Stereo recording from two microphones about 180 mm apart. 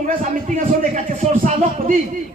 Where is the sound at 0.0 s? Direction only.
45° right (ahead or behind).